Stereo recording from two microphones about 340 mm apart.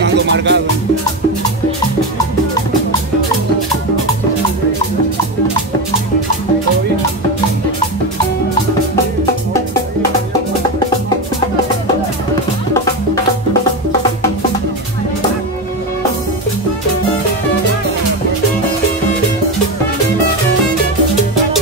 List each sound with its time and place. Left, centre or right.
0.0 s music: right